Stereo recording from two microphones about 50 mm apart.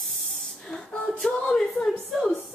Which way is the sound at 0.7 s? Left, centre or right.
Centre.